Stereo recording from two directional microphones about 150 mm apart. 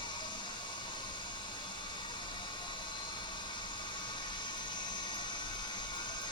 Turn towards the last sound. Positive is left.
turn(degrees=30)  # may be behind; listen again after turning